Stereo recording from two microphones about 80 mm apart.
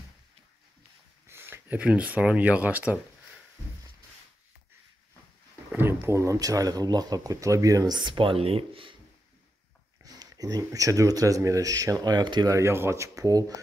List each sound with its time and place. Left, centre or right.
1.2 s a sound: right
1.8 s speech: centre
5.7 s speech: right
10.0 s speech: right
12.4 s speech: right